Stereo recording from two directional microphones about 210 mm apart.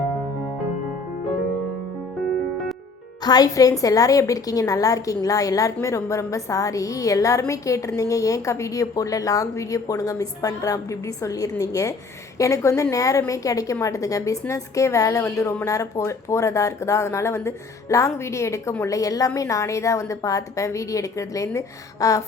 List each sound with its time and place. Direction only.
3.2 s a woman's voice: 20° left (ahead or behind)